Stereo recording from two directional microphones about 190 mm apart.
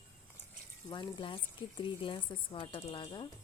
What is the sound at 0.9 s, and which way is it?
Speech, 25° left (ahead or behind).